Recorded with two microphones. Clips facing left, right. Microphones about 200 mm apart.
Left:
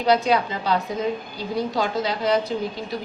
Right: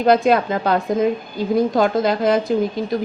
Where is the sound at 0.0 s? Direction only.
55° right (ahead or behind).